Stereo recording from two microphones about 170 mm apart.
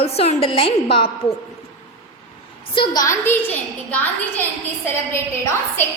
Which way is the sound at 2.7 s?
25° left (ahead or behind).